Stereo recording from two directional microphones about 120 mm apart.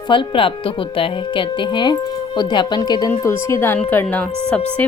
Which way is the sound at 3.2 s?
25° left (ahead or behind).